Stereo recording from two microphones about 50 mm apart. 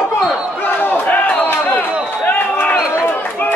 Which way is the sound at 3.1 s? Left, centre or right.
Left.